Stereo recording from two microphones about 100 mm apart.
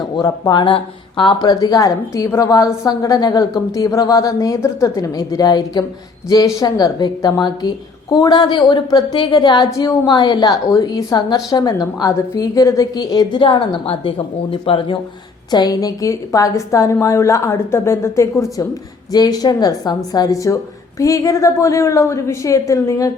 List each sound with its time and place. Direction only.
0.2 s a woman's voice: 40° left (ahead or behind)
0.6 s a woman's voice: 55° left (ahead or behind); by 13.4 s 40° left (ahead or behind)
13.4 s a woman's voice: 65° left (ahead or behind)
15.4 s a woman's voice: 45° left (ahead or behind)